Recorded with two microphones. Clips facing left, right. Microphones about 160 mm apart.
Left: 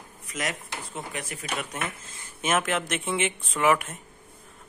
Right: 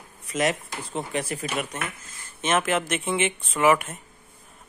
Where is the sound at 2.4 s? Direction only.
Centre (ahead or behind).